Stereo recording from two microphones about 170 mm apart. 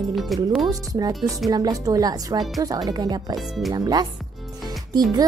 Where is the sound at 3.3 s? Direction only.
Centre (ahead or behind).